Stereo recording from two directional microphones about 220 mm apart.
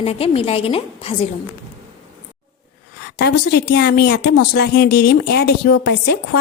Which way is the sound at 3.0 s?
45° left (ahead or behind).